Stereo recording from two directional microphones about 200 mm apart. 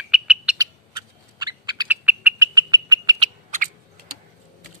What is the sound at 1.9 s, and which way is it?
Bird, 10° right (ahead or behind).